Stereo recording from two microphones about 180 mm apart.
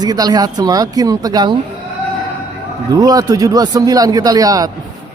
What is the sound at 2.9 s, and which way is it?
Speech, 20° right (ahead or behind).